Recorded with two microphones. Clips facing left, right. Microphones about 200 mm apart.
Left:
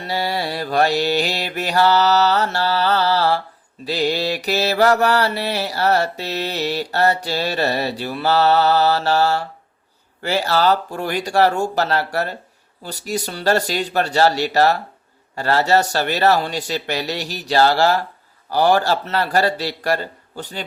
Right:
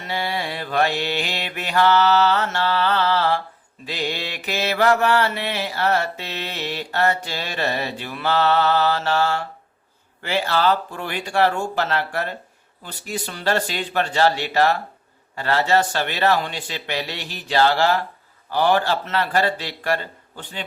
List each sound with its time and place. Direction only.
0.0 s mantra: 40° left (ahead or behind)